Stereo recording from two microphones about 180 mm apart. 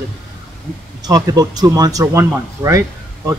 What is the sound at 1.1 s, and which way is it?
A man's voice, 20° right (ahead or behind).